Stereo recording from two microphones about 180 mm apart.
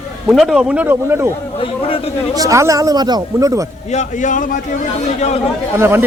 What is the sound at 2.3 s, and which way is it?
Speech, 20° right (ahead or behind).